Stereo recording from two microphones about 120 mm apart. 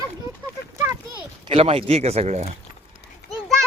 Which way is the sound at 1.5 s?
55° right (ahead or behind).